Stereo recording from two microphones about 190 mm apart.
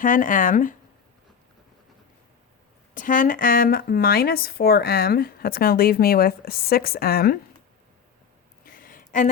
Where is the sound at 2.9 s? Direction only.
45° left (ahead or behind).